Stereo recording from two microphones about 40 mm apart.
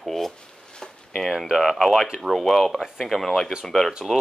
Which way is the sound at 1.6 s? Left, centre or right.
Centre.